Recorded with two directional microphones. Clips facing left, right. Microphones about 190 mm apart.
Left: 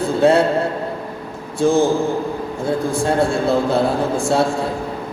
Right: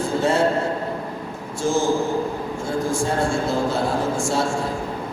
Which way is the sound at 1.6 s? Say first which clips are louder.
Left 5 dB; 60° left (ahead or behind).